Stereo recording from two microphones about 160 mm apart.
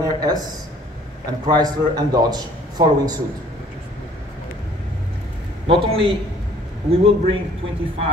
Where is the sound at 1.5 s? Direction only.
25° right (ahead or behind).